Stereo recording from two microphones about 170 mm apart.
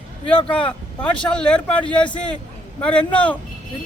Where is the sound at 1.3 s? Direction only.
5° left (ahead or behind).